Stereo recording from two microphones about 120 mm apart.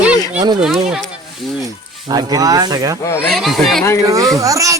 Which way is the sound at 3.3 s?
Centre (ahead or behind).